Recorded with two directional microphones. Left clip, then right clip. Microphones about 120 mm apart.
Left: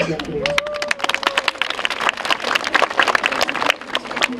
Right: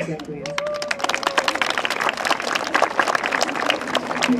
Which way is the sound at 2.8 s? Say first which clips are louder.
Left 3 dB; 15° right (ahead or behind).